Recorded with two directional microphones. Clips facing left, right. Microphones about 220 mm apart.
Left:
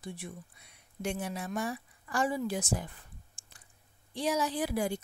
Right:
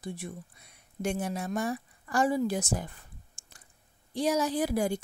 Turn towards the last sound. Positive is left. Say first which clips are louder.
# right 4 dB
turn(degrees=-45)  # may be behind; listen again after turning